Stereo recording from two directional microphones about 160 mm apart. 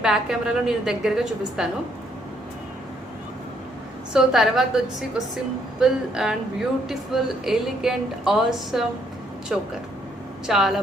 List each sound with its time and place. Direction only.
0.0 s speech: 5° right (ahead or behind)
4.1 s speech: 5° right (ahead or behind)